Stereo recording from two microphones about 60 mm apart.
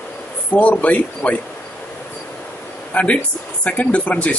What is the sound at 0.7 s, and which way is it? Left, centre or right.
Speech, left.